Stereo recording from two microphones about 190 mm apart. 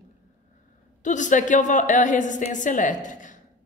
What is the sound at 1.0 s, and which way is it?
A woman's voice, 40° left (ahead or behind).